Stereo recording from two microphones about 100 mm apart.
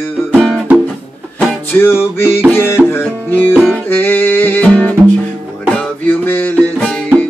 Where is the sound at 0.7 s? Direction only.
15° right (ahead or behind).